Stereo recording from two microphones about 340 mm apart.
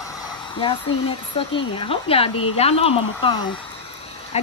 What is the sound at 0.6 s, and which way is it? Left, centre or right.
Speech, centre.